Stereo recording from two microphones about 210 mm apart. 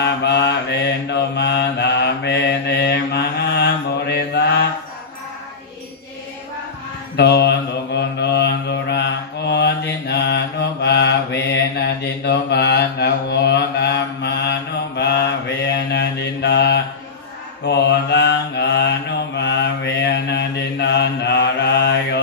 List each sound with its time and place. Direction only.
0.0 s mantra: 55° left (ahead or behind)
7.2 s mantra: 50° left (ahead or behind)